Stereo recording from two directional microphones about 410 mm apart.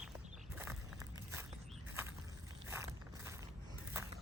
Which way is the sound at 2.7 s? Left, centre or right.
Centre.